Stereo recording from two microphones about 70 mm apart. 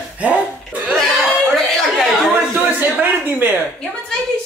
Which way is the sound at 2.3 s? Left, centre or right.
Right.